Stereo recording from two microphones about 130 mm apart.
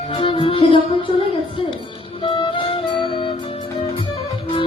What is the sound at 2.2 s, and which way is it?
Music, 40° left (ahead or behind).